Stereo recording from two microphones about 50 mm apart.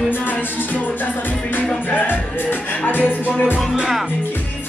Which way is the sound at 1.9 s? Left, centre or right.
Left.